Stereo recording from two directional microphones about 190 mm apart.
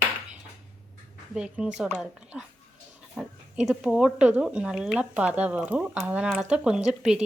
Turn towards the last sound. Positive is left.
turn(degrees=-5)  # may be behind; listen again after turning